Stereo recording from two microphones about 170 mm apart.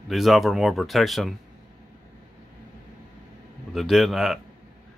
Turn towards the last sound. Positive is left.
turn(degrees=0)  # may be behind; listen again after turning